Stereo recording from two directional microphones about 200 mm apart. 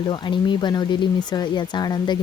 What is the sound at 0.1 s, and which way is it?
Speech, 25° left (ahead or behind).